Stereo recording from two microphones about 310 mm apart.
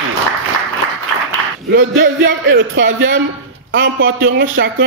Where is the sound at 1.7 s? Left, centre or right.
Right.